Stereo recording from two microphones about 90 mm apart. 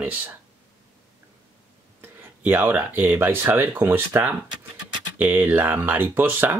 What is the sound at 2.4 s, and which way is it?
Speech, 20° right (ahead or behind).